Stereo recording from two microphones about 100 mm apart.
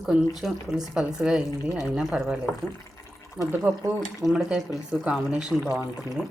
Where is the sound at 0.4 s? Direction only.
5° right (ahead or behind).